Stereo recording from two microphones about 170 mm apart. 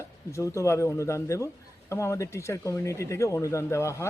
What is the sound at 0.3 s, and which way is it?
A man's voice, 15° left (ahead or behind).